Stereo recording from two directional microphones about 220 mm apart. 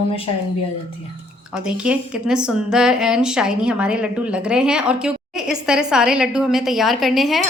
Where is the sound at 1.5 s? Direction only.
5° right (ahead or behind).